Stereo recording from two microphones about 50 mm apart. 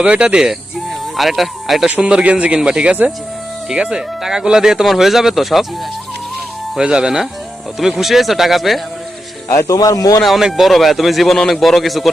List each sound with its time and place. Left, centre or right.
0.0 s speech: right
1.1 s speech: centre
2.0 s speech: centre
6.7 s speech: centre
9.5 s speech: left
10.4 s speech: centre